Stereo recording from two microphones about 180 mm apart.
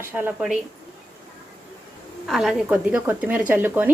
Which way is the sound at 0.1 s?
10° right (ahead or behind).